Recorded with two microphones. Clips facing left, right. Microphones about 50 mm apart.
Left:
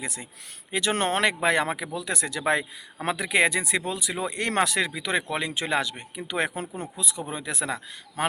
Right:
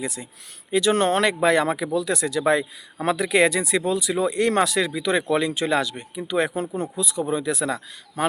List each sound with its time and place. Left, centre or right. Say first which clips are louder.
0.0 s speech: right 5 dB; left
3.0 s speech: right 4 dB; left
6.9 s speech: right 8 dB; left